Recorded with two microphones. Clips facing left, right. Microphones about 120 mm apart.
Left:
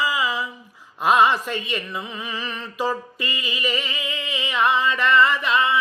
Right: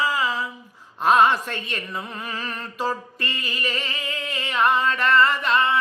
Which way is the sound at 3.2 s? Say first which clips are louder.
Left 2 dB; 40° right (ahead or behind).